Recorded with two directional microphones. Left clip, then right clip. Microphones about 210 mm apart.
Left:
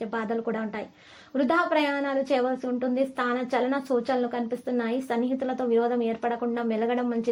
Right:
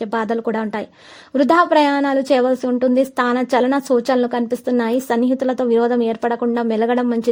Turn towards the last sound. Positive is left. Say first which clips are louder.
# right 9 dB
turn(degrees=-40)  # may be behind; listen again after turning